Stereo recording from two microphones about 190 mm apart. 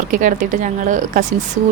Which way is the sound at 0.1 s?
45° right (ahead or behind).